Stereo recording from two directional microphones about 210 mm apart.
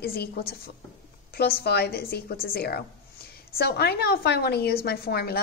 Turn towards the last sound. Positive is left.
turn(degrees=50)  # may be behind; listen again after turning